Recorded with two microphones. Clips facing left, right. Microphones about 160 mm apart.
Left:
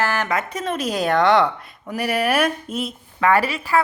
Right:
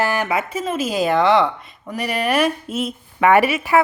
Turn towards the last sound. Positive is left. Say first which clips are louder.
# right 4 dB
turn(degrees=-20)  # may be behind; listen again after turning